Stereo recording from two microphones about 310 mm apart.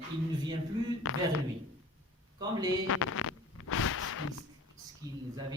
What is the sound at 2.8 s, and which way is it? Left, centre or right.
Zipper, left.